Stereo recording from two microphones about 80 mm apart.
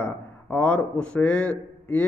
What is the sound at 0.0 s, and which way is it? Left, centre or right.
A man's voice, centre.